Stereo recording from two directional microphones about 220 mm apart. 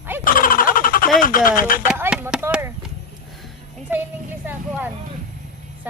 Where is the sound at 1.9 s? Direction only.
5° right (ahead or behind).